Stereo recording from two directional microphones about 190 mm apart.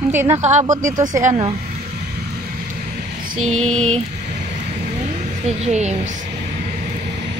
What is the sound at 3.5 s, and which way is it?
Speech, 35° right (ahead or behind).